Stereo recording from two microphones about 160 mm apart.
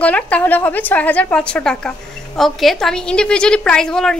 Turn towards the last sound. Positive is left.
turn(degrees=5)  # may be behind; listen again after turning